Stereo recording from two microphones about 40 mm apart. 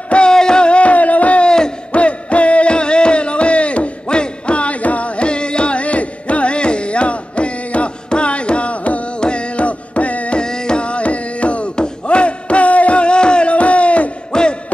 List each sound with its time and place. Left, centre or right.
0.3 s a sound: centre; by 1.5 s left
1.9 s music: left
9.2 s carnatic music: left
10.4 s music: centre
11.7 s a sound: left
14.3 s hoot: left